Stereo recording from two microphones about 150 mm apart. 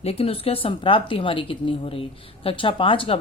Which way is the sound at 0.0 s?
40° left (ahead or behind).